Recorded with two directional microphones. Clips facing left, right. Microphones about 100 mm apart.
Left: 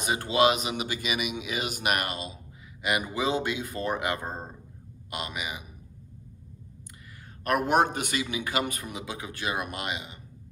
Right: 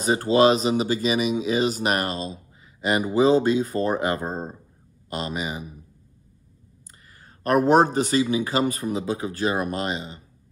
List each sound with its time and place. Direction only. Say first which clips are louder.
0.0 s speech: right 6 dB; 35° right (ahead or behind)
4.3 s speech: right 6 dB; 25° right (ahead or behind)
7.4 s speech: right 6 dB; 35° right (ahead or behind)